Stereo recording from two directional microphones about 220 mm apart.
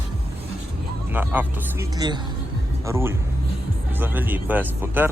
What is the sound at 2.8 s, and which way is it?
Speech, 10° right (ahead or behind).